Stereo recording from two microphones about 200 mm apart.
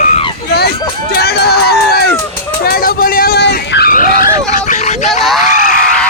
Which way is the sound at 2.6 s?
50° left (ahead or behind).